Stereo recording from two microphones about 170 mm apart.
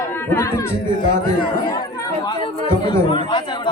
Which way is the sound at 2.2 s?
30° left (ahead or behind).